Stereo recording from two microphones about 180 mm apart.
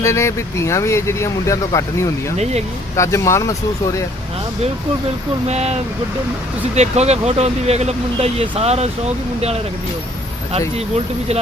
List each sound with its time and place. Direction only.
0.0 s speech: 15° left (ahead or behind)
2.4 s speech: 35° right (ahead or behind)
2.9 s speech: 15° left (ahead or behind)
5.5 s speech: 35° right (ahead or behind)
6.7 s speech: 35° right (ahead or behind)
10.8 s speech: 35° right (ahead or behind)